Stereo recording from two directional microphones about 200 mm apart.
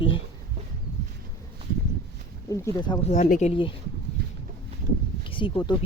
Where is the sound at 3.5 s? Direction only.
25° left (ahead or behind).